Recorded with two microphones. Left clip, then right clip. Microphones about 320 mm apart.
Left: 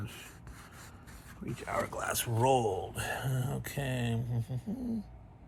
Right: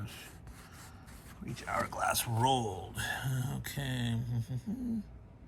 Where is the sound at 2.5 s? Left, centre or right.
Right.